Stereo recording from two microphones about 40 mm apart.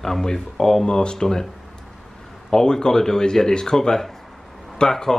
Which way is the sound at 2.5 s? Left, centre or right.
Centre.